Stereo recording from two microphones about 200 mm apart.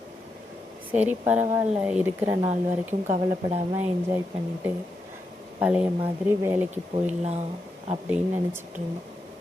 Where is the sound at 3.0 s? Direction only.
30° right (ahead or behind).